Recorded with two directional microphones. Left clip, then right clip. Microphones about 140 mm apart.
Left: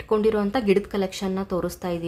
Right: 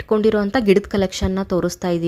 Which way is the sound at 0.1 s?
40° right (ahead or behind).